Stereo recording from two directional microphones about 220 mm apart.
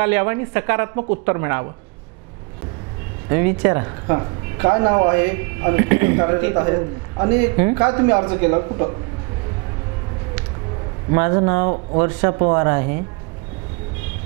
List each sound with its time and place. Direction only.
0.0 s speech: 15° right (ahead or behind)
3.3 s speech: 25° right (ahead or behind)
11.1 s speech: 25° right (ahead or behind)